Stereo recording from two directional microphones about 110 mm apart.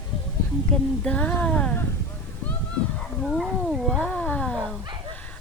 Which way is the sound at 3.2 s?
Centre (ahead or behind).